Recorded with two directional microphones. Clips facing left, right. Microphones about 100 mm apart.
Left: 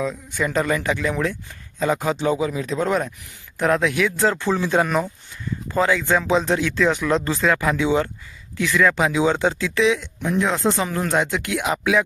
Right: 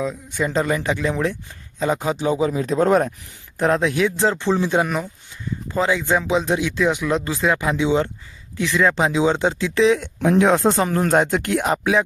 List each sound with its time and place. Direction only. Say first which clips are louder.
0.0 s speech: right 1 dB; 20° right (ahead or behind)
2.4 s speech: right 4 dB; 35° right (ahead or behind)
3.6 s speech: right 1 dB; 30° right (ahead or behind)
10.2 s speech: right 6 dB; 70° right (ahead or behind)
10.5 s speech: right 4 dB; 45° right (ahead or behind)